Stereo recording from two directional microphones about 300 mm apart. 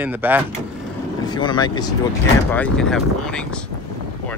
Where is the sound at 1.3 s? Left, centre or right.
Centre.